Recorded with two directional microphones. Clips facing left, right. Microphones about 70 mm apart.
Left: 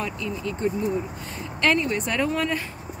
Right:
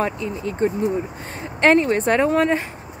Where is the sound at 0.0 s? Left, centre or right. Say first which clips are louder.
Right 5 dB; right.